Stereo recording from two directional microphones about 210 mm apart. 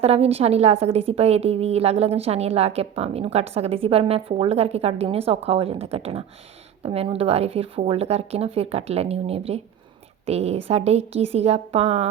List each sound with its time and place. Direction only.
0.0 s a woman's voice: 30° right (ahead or behind)